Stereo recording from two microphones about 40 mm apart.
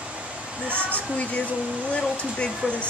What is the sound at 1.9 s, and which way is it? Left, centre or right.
Speech, left.